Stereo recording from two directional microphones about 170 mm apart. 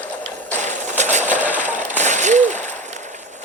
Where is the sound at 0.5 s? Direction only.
45° right (ahead or behind).